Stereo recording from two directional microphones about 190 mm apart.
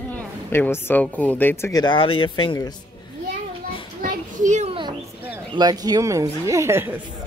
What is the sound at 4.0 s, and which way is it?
Children playing, 40° right (ahead or behind).